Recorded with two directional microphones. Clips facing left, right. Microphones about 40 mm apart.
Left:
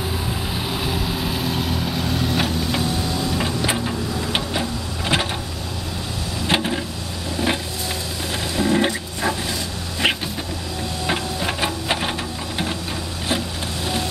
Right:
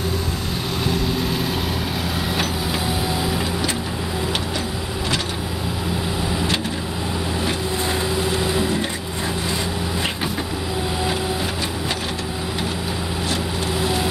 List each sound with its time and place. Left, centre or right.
0.8 s vehicle: centre
8.7 s printer: left